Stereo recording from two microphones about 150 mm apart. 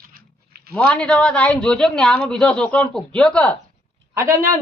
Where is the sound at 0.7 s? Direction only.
5° left (ahead or behind).